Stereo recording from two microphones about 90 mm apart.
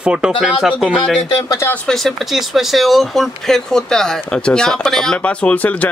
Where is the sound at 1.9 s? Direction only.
5° left (ahead or behind).